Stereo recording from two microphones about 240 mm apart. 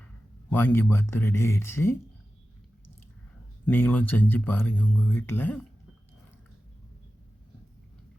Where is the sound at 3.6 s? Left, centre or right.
Centre.